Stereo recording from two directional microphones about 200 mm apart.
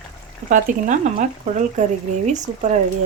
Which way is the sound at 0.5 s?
40° right (ahead or behind).